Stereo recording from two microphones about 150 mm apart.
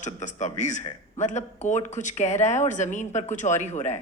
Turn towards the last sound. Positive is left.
turn(degrees=50)  # may be behind; listen again after turning